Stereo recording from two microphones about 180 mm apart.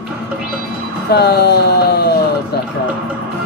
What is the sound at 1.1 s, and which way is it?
Speech, 65° left (ahead or behind).